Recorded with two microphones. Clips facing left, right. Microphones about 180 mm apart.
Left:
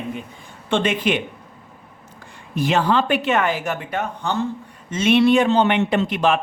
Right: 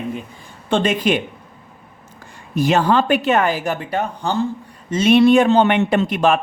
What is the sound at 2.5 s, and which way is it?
A woman's voice, 45° right (ahead or behind).